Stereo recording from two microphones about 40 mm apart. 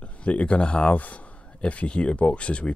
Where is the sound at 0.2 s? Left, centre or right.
Left.